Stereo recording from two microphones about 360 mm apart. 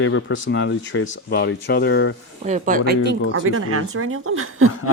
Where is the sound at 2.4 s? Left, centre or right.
Centre.